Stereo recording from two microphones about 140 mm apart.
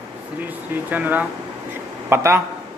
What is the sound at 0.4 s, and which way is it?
A man's voice, 10° right (ahead or behind).